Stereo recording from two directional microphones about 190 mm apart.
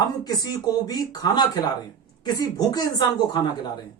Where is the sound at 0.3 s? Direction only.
20° left (ahead or behind).